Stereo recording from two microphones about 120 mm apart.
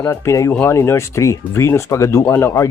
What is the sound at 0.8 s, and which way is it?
Speech, 25° left (ahead or behind).